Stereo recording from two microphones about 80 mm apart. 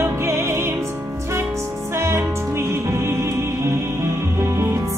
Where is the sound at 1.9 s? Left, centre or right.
Right.